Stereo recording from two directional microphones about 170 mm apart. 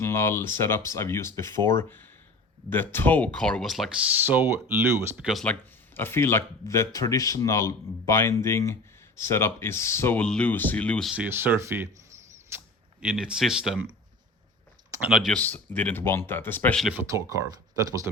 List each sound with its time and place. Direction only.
0.0 s speech: 15° left (ahead or behind)
11.1 s speech: 10° right (ahead or behind)
15.0 s speech: 5° right (ahead or behind)
15.4 s speech: 10° left (ahead or behind)
17.1 s speech: 20° right (ahead or behind)